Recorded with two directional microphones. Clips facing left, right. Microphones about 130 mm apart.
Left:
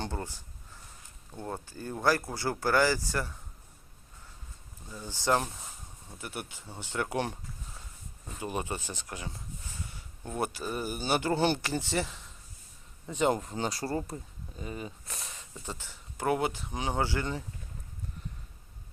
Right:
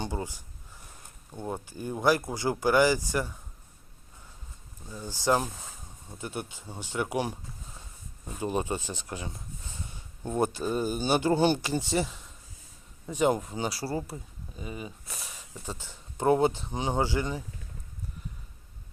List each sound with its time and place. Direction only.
0.0 s speech: 10° right (ahead or behind)
4.9 s speech: 10° right (ahead or behind)